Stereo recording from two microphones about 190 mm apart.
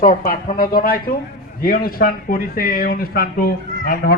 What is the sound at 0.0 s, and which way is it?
Speech, 50° left (ahead or behind).